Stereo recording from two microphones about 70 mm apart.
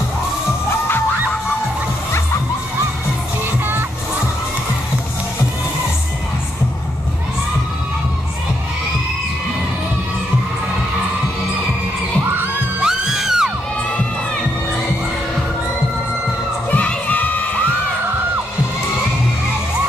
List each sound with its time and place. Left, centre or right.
12.8 s music: centre
16.7 s crowd: left